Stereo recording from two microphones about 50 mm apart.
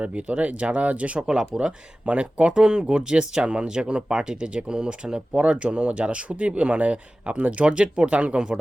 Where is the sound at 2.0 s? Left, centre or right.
Right.